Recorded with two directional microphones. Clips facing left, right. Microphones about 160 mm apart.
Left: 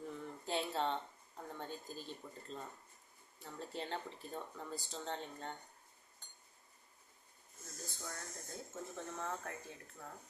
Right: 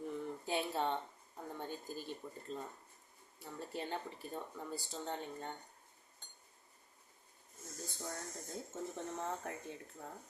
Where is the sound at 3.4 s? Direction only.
5° right (ahead or behind).